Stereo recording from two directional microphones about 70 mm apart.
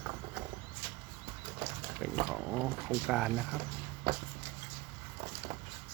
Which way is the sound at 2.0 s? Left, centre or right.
Centre.